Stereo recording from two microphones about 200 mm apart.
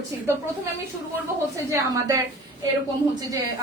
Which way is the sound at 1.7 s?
15° right (ahead or behind).